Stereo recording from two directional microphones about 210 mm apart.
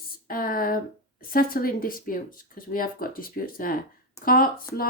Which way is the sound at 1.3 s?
45° left (ahead or behind).